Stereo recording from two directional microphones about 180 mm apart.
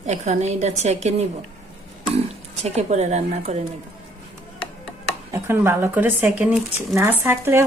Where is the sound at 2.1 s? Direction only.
35° right (ahead or behind).